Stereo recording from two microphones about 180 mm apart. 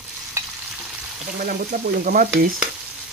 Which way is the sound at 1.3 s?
50° right (ahead or behind).